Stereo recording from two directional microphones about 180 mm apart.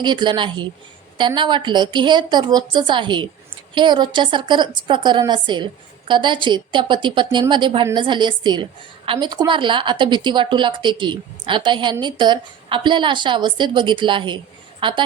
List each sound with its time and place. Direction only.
0.0 s a woman's voice: 25° right (ahead or behind)